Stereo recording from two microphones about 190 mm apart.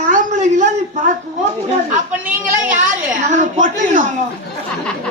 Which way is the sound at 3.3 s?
40° right (ahead or behind).